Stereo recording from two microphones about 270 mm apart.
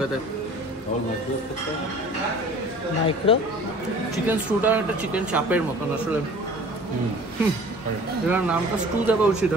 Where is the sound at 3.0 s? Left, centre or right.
Centre.